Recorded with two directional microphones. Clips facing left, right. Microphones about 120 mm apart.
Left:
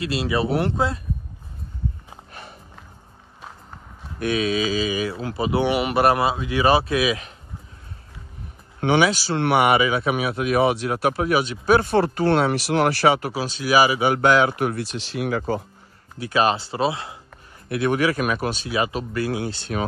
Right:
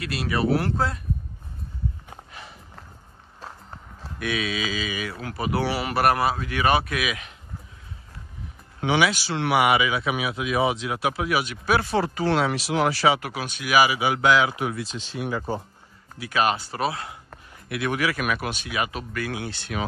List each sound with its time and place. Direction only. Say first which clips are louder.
0.0 s speech: left 2 dB; 25° left (ahead or behind)
4.2 s speech: left 6 dB; 40° left (ahead or behind)
5.1 s speech: left 4 dB; 25° left (ahead or behind)
8.8 s speech: left 3 dB; 45° left (ahead or behind)
9.4 s speech: left 2 dB; 55° left (ahead or behind)
13.2 s speech: left 5 dB; 30° left (ahead or behind); by 15.6 s 90° left
16.2 s speech: left 3 dB; 30° left (ahead or behind)